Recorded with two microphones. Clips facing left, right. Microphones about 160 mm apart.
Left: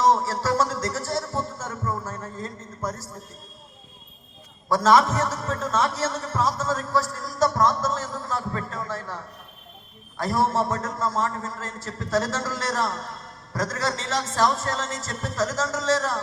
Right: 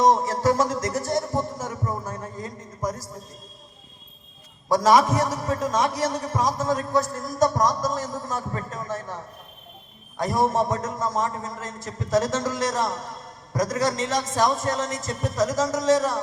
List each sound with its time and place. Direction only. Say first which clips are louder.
0.0 s music: right 2 dB; 15° right (ahead or behind)
4.7 s a man's voice: right 1 dB; 15° right (ahead or behind)